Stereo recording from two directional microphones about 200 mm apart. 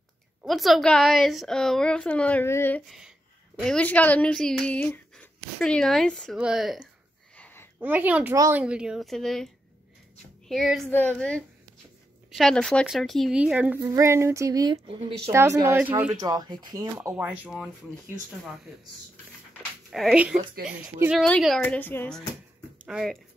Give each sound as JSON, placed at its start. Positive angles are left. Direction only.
{"t": 0.4, "sound": "speech", "side_deg": 0}
{"t": 7.3, "sound": "a sound", "side_deg": 10}
{"t": 7.8, "sound": "speech", "side_deg": -10}
{"t": 10.5, "sound": "speech", "side_deg": 0}
{"t": 15.3, "sound": "speech", "side_deg": -15}
{"t": 17.1, "sound": "speech", "side_deg": -5}
{"t": 19.9, "sound": "speech", "side_deg": 0}
{"t": 22.8, "sound": "speech", "side_deg": -5}